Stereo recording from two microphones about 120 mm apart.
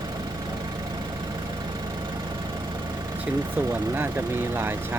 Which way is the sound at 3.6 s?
20° right (ahead or behind).